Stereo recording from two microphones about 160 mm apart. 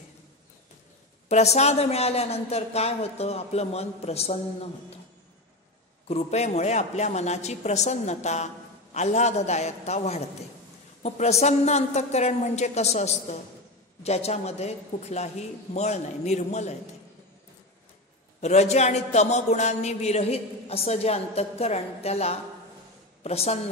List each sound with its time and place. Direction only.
1.3 s speech: 45° left (ahead or behind)
6.0 s a woman's voice: 40° left (ahead or behind)
18.4 s speech: 45° left (ahead or behind)